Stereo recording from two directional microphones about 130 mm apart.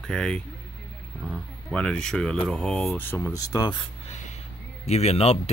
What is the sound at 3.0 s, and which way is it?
Speech, 15° left (ahead or behind).